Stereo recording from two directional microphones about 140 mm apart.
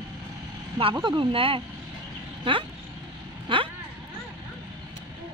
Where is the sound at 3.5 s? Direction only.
40° right (ahead or behind).